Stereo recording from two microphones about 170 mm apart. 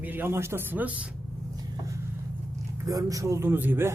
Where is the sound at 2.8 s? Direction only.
20° right (ahead or behind).